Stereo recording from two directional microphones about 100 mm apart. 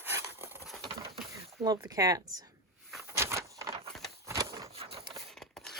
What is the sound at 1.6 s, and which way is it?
Speech, 40° right (ahead or behind).